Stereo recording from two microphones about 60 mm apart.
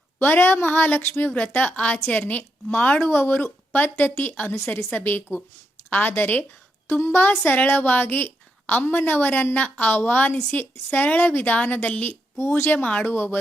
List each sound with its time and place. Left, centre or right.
0.2 s a woman's voice: left
3.0 s a woman's voice: left
12.4 s a woman's voice: left
13.1 s a woman's voice: left